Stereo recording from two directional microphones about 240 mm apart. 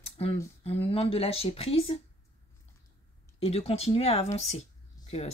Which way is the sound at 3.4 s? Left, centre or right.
Left.